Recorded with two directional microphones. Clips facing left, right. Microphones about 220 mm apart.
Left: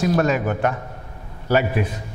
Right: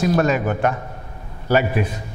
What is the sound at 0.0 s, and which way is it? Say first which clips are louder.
A man's voice: right 1 dB; 15° right (ahead or behind).